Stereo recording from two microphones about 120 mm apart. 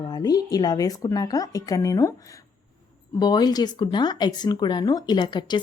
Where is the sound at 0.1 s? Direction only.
30° left (ahead or behind).